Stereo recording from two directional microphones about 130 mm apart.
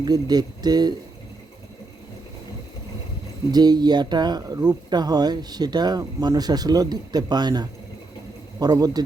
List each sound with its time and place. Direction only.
0.0 s speech: 30° right (ahead or behind)
3.5 s speech: 30° right (ahead or behind)